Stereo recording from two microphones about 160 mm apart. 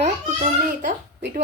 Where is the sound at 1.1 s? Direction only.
90° right.